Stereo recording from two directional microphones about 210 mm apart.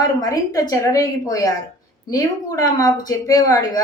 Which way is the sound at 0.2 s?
15° left (ahead or behind).